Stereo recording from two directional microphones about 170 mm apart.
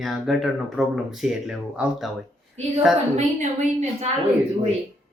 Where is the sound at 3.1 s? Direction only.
40° right (ahead or behind).